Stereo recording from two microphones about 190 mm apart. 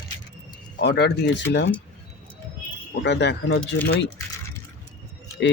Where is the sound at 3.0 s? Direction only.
65° left (ahead or behind).